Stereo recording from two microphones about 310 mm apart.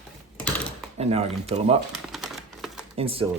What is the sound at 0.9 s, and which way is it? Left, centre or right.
Speech, centre.